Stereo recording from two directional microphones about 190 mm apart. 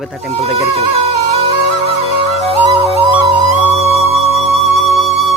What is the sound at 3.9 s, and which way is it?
Music, 35° right (ahead or behind).